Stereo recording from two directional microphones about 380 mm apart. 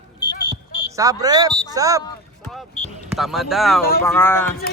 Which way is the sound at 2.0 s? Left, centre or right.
Centre.